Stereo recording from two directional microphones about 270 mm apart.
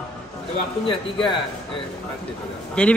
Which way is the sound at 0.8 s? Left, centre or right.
Centre.